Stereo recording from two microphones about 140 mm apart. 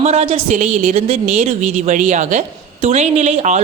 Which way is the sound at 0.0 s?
50° right (ahead or behind).